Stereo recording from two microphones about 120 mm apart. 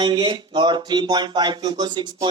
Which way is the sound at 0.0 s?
40° right (ahead or behind).